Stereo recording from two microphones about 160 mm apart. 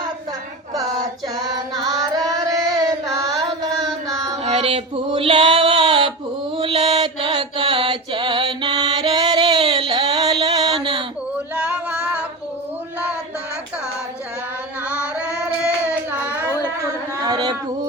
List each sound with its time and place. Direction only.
0.7 s female singing: 25° right (ahead or behind)
1.9 s carnatic music: 25° right (ahead or behind)
3.4 s music: 20° right (ahead or behind)
4.4 s male singing: 40° right (ahead or behind)
6.6 s mantra: 35° right (ahead or behind)
9.9 s a sound: 25° right (ahead or behind)
10.4 s music: 25° right (ahead or behind)
11.5 s a sound: 5° right (ahead or behind)
17.2 s a sound: 25° right (ahead or behind)